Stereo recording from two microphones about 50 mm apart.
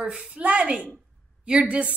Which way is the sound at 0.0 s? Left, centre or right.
Centre.